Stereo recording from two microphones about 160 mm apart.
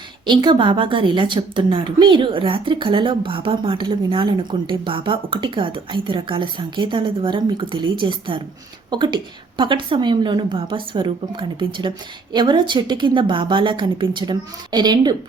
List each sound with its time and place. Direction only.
0.3 s a woman's voice: 30° right (ahead or behind)